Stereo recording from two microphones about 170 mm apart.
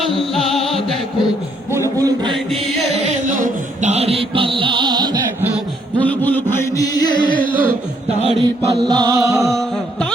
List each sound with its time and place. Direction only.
0.2 s music: centre (ahead or behind)
1.7 s a sound: 20° right (ahead or behind)
2.3 s music: centre (ahead or behind)
2.9 s music: 45° right (ahead or behind); by 5.2 s 25° right (ahead or behind)
6.0 s a sound: 10° left (ahead or behind)
6.8 s music: 20° left (ahead or behind)
7.3 s music: 55° right (ahead or behind)
8.2 s mantra: 35° right (ahead or behind)
8.7 s music: 25° right (ahead or behind)
9.5 s music: centre (ahead or behind)